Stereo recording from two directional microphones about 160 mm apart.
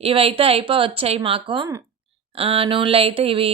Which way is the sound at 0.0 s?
35° right (ahead or behind).